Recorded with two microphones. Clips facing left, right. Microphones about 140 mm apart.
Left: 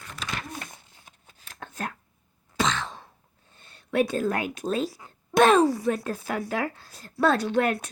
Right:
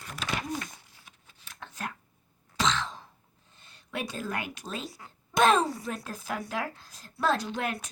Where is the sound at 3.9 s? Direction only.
55° left (ahead or behind).